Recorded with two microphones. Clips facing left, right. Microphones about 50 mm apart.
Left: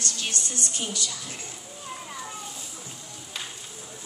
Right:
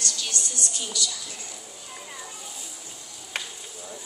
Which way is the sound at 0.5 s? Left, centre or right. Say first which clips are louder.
Left 1 dB; left.